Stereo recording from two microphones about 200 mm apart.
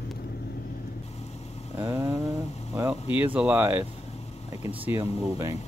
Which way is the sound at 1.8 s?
10° right (ahead or behind).